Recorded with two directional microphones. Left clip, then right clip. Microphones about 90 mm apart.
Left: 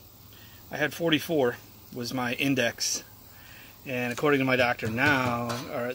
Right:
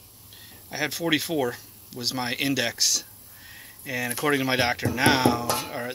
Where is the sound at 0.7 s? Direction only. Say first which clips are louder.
Right 1 dB; centre (ahead or behind).